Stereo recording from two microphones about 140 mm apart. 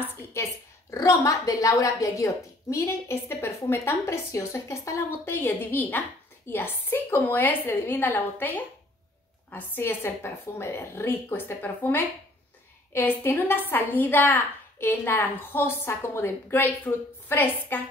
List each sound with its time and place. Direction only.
0.0 s a woman's voice: 20° left (ahead or behind)